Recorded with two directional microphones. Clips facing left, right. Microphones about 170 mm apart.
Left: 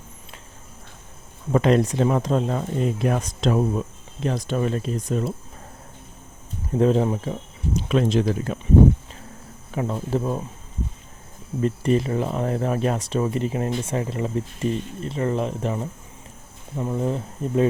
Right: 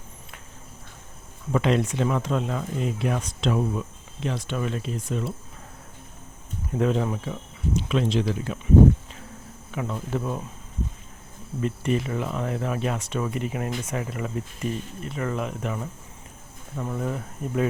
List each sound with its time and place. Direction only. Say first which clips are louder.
1.5 s speech: left 4 dB; 40° left (ahead or behind)
6.7 s speech: left 5 dB; 35° left (ahead or behind)
9.7 s speech: left 4 dB; 35° left (ahead or behind)
11.6 s speech: left 4 dB; 35° left (ahead or behind)
16.7 s speech: left 4 dB; 20° left (ahead or behind)